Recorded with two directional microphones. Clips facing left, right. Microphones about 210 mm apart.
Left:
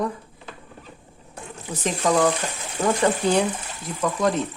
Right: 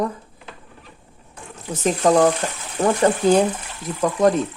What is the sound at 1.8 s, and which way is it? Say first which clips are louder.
Speech: right 5 dB; 40° right (ahead or behind).